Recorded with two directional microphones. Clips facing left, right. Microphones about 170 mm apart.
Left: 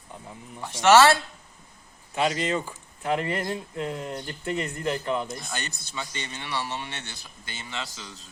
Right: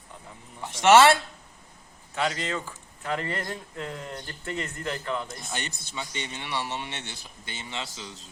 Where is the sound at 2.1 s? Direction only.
20° left (ahead or behind).